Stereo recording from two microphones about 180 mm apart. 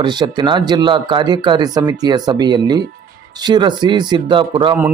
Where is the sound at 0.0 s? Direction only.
25° right (ahead or behind).